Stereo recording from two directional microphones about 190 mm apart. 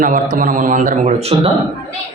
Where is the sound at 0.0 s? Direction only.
45° right (ahead or behind).